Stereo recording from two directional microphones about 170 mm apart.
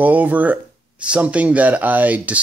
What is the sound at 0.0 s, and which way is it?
Speech, 10° right (ahead or behind).